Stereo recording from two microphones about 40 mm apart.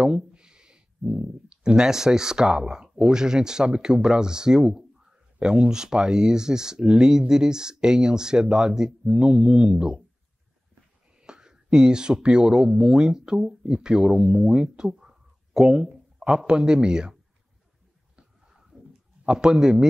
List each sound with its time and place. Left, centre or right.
0.0 s speech: right
11.1 s speech: centre
19.2 s speech: centre